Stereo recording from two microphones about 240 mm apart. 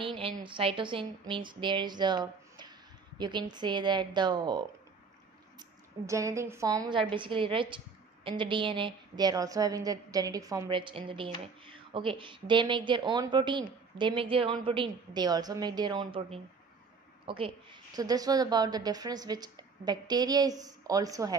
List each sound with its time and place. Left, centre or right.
0.0 s a woman's voice: right